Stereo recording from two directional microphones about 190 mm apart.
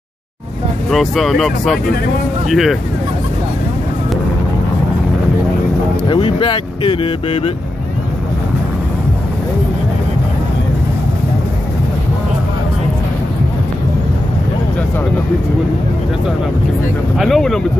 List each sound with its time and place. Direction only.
0.8 s speech: centre (ahead or behind)
6.0 s speech: 25° left (ahead or behind)
17.2 s speech: centre (ahead or behind)